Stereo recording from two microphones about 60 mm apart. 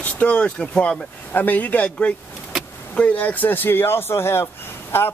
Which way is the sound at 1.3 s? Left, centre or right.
Left.